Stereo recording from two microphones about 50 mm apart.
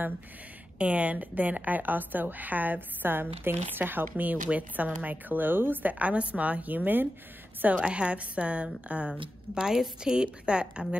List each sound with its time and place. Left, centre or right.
0.7 s a woman's voice: right
7.7 s a woman's voice: right